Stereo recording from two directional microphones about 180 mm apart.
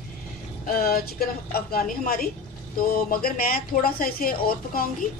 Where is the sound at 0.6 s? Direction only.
55° left (ahead or behind).